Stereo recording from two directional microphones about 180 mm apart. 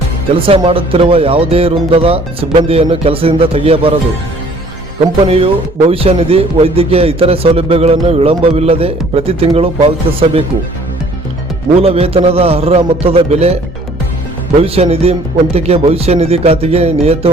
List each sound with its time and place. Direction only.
0.4 s a man's voice: 30° right (ahead or behind)
5.2 s a man's voice: 30° right (ahead or behind)
11.8 s a man's voice: 35° right (ahead or behind)
14.6 s a man's voice: 35° right (ahead or behind)